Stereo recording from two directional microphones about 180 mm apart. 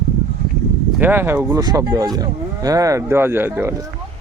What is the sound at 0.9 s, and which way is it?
Speech, 10° right (ahead or behind).